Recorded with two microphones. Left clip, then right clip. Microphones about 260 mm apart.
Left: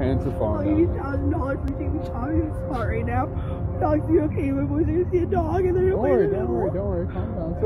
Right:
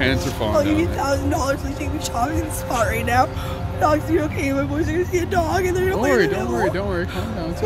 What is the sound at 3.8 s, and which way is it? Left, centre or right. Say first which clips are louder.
Speech: right 3 dB; right.